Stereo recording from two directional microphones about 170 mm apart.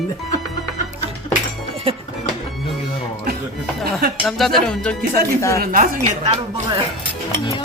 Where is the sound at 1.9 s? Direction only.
35° right (ahead or behind).